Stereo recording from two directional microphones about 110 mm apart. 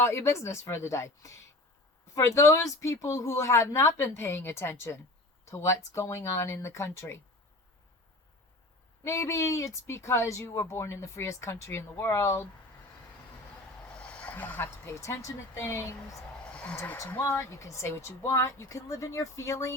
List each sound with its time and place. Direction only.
0.0 s speech: 25° left (ahead or behind)
9.0 s speech: 25° left (ahead or behind)
14.0 s speech: 10° left (ahead or behind)
16.4 s a sound: 10° left (ahead or behind)
17.1 s speech: 25° left (ahead or behind)